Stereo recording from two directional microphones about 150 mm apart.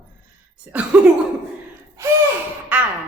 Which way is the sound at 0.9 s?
10° right (ahead or behind).